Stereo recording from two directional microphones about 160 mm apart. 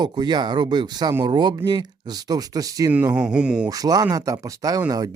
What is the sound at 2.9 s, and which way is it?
Speech, 10° right (ahead or behind).